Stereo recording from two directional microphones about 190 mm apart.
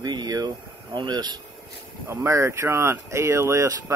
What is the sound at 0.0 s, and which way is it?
Speech, 20° right (ahead or behind).